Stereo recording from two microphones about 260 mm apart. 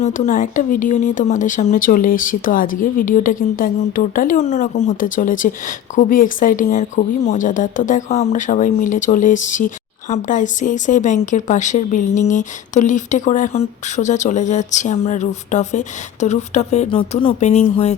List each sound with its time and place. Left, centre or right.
0.0 s speech: left